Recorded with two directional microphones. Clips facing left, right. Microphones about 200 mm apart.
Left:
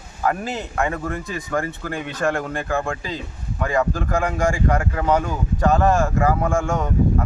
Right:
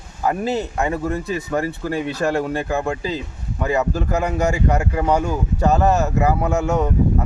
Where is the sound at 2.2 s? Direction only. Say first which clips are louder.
Even; 10° right (ahead or behind).